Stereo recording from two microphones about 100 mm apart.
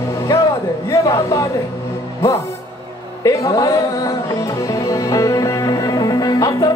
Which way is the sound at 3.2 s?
35° left (ahead or behind).